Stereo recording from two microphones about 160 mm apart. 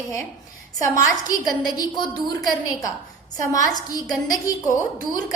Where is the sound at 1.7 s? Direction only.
25° left (ahead or behind).